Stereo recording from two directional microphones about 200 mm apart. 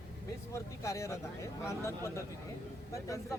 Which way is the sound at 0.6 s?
15° left (ahead or behind).